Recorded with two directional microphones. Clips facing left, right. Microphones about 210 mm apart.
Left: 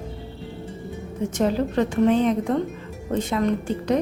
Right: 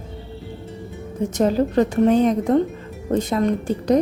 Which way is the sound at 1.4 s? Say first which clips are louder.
Right 4 dB; 40° right (ahead or behind).